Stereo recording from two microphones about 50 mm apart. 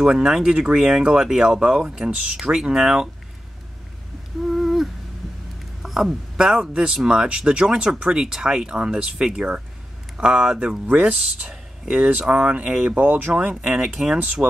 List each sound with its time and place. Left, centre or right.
0.0 s speech: centre
4.5 s humming: centre
5.8 s a sound: centre
6.7 s speech: centre
12.9 s speech: right
13.3 s speech: right